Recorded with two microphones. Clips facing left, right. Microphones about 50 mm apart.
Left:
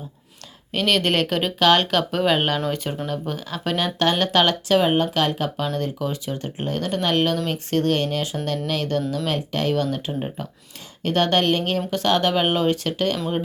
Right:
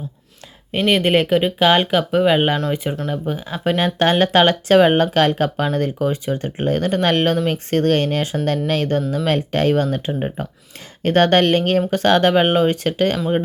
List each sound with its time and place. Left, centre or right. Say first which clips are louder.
0.7 s speech: right 4 dB; centre
11.0 s speech: right 5 dB; right